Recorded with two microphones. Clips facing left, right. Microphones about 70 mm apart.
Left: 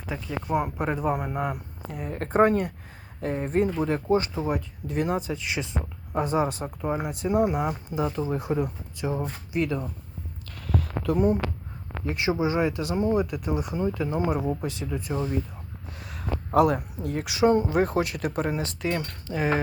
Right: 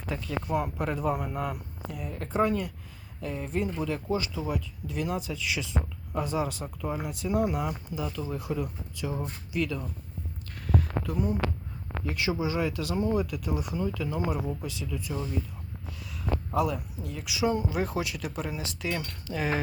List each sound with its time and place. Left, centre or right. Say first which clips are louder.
0.1 s speech: left 2 dB; left
1.9 s speech: left 6 dB; left
7.9 s speech: left 6 dB; left
10.5 s a sound: even; left
11.1 s speech: left 9 dB; left
12.0 s speech: left 4 dB; left